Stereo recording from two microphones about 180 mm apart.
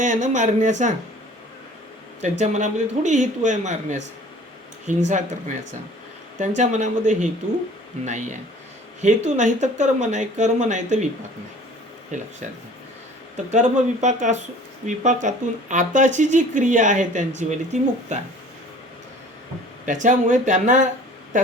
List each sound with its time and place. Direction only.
0.0 s speech: 40° right (ahead or behind)
2.2 s speech: 40° right (ahead or behind)
6.6 s speech: 40° right (ahead or behind)
12.1 s speech: 40° right (ahead or behind)
13.3 s speech: 40° right (ahead or behind)
19.8 s speech: 45° right (ahead or behind)